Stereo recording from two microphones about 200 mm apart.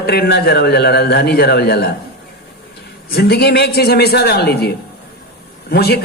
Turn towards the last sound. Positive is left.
turn(degrees=55)  # may be behind; listen again after turning